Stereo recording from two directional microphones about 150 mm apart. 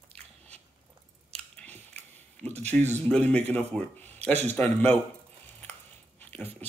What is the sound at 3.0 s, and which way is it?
Speech, 10° left (ahead or behind).